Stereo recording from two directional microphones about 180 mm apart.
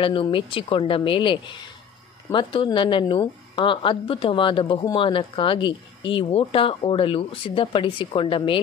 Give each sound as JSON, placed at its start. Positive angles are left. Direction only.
{"t": 0.0, "sound": "speech", "side_deg": 30}